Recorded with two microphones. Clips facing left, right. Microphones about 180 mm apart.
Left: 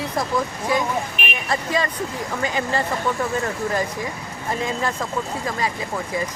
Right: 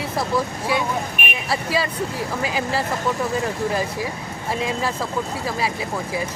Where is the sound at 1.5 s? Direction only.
5° right (ahead or behind).